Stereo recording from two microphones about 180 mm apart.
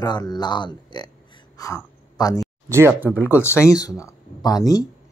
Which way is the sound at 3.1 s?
15° left (ahead or behind).